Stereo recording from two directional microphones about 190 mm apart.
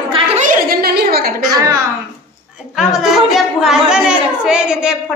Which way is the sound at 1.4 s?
20° right (ahead or behind).